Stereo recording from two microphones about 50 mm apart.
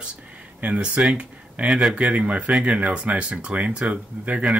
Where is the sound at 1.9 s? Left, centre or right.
Right.